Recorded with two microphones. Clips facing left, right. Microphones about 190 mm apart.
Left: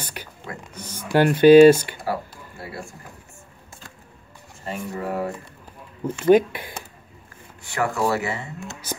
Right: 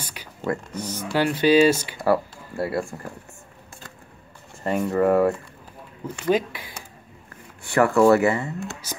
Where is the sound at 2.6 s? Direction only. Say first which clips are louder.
Right 11 dB; 60° right (ahead or behind).